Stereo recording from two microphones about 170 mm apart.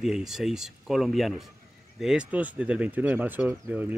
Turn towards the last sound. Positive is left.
turn(degrees=-10)  # may be behind; listen again after turning